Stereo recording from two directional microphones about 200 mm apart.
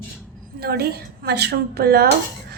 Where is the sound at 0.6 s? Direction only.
50° right (ahead or behind).